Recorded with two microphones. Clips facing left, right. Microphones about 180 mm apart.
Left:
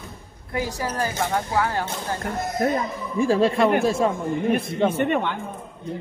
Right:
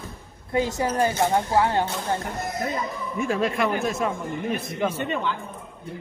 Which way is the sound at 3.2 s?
30° left (ahead or behind).